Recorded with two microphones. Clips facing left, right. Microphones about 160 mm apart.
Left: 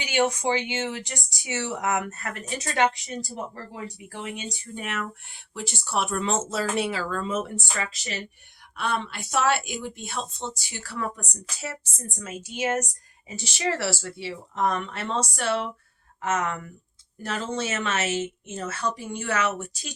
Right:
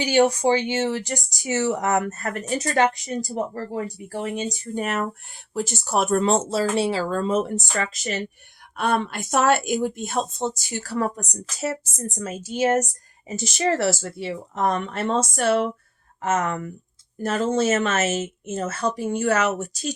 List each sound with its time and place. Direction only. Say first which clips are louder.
0.0 s speech: right 6 dB; 35° right (ahead or behind)